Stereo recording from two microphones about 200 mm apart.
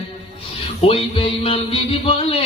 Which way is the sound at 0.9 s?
30° left (ahead or behind).